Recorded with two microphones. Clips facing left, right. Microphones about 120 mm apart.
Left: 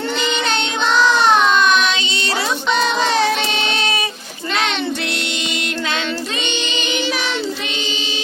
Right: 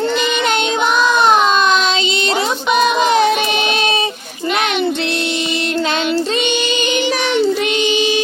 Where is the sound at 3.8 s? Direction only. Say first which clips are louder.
Right 4 dB; 25° right (ahead or behind).